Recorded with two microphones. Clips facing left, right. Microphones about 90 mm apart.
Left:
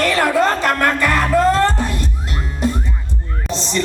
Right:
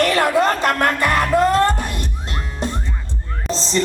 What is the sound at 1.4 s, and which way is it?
Music, 25° left (ahead or behind).